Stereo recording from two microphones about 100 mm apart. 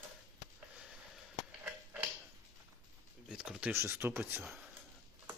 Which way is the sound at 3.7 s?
25° right (ahead or behind).